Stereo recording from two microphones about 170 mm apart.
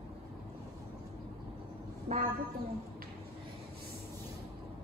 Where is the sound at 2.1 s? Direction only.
40° right (ahead or behind).